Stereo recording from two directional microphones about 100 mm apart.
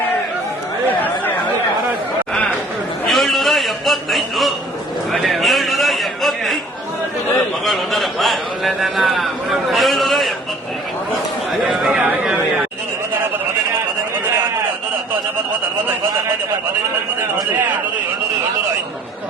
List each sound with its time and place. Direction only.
0.9 s chatter: 20° left (ahead or behind)
3.1 s a sound: centre (ahead or behind)
7.6 s a man's voice: centre (ahead or behind)
11.6 s a man's voice: 5° right (ahead or behind)